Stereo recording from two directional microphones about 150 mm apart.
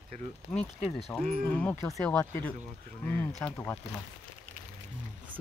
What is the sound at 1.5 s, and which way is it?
Speech, 10° left (ahead or behind).